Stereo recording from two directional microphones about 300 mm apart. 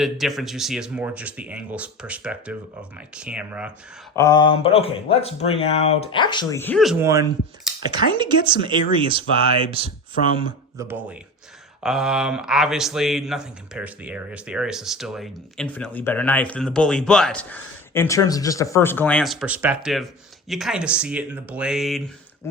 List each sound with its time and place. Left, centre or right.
0.0 s a man's voice: centre
4.1 s speech: centre
10.3 s a man's voice: centre